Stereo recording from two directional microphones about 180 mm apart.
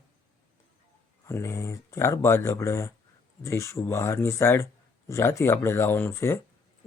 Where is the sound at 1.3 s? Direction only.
15° left (ahead or behind).